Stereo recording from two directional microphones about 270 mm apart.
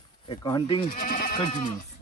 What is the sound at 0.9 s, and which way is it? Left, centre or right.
Speech, left.